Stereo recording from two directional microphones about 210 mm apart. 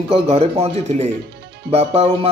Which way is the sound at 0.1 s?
30° right (ahead or behind).